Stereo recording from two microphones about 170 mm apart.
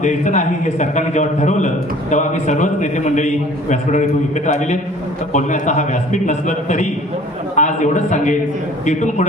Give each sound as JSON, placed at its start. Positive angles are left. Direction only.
{"t": 0.0, "sound": "a man's voice", "side_deg": 45}